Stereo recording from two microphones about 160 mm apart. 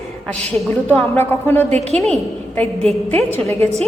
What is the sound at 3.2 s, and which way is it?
Speech, 15° left (ahead or behind).